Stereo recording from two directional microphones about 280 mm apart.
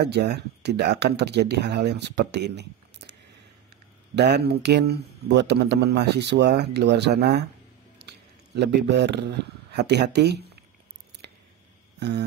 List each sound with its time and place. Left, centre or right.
0.0 s speech: right
4.1 s a man's voice: right
12.0 s a sound: right